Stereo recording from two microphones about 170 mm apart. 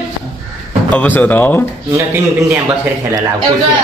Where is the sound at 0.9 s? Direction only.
10° left (ahead or behind).